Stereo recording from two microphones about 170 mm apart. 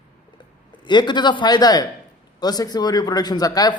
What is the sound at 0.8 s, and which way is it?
Speech, 25° left (ahead or behind).